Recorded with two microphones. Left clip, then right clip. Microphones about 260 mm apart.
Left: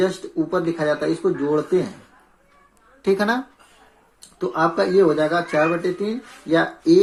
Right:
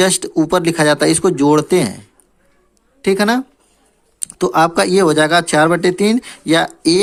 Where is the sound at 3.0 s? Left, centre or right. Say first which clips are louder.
Right 5 dB; right.